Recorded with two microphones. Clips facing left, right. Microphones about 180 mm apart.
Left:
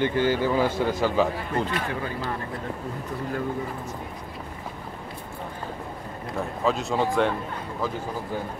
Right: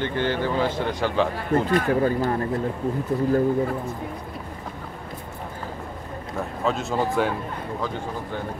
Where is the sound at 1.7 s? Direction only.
45° right (ahead or behind).